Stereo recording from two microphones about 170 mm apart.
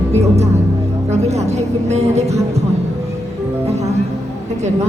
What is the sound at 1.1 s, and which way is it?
Speech, 40° right (ahead or behind).